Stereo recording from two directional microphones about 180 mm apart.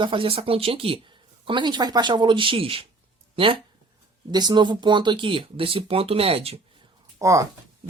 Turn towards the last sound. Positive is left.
turn(degrees=-20)  # may be behind; listen again after turning